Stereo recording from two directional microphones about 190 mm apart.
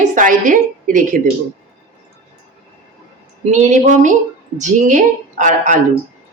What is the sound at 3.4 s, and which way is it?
A woman's voice, 35° right (ahead or behind).